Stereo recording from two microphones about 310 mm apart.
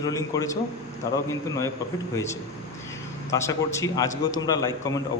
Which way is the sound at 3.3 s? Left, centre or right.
Centre.